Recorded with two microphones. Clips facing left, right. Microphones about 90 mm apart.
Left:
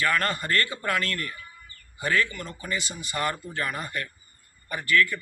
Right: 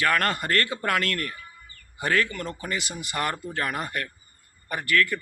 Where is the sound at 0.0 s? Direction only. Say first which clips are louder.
Right 2 dB; 65° right (ahead or behind).